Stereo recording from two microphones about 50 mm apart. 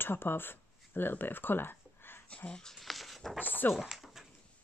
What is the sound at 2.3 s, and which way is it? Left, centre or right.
Speech, centre.